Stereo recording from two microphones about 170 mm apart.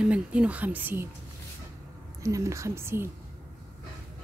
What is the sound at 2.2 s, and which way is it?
Speech, 20° right (ahead or behind).